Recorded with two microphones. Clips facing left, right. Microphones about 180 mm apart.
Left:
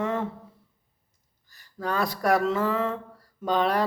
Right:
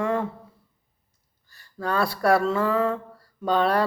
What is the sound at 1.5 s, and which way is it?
Speech, 15° left (ahead or behind).